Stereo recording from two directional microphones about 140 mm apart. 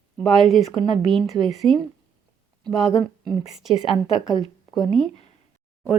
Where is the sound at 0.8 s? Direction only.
35° right (ahead or behind).